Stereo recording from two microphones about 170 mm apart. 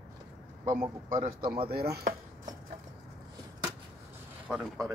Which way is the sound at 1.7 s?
70° right (ahead or behind).